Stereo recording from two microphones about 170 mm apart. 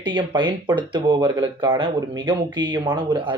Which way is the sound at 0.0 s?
30° right (ahead or behind).